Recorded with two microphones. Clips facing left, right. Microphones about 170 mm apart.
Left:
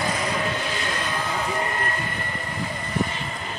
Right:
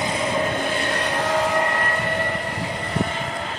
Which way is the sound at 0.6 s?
55° right (ahead or behind).